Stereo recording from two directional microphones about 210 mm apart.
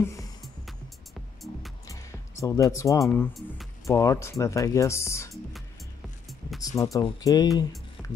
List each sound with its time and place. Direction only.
0.0 s music: 15° left (ahead or behind)
1.9 s music: 15° left (ahead or behind)
2.7 s speech: 15° left (ahead or behind)
3.8 s speech: 15° left (ahead or behind)
6.6 s speech: 15° left (ahead or behind)